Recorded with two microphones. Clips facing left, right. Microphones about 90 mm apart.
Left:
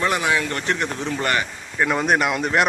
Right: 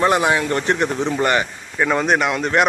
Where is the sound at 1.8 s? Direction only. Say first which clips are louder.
Right 2 dB; centre (ahead or behind).